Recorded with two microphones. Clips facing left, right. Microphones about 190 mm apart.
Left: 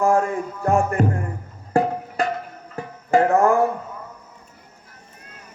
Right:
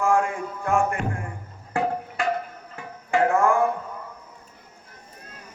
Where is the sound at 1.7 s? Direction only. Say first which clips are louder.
Left 5 dB; 40° left (ahead or behind).